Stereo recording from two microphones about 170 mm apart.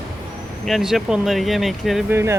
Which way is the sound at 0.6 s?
Centre (ahead or behind).